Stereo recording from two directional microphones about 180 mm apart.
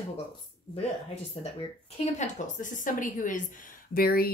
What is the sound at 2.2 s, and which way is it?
Speech, 45° left (ahead or behind).